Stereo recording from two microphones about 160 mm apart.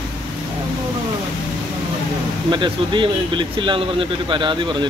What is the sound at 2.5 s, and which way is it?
Speech, 30° right (ahead or behind).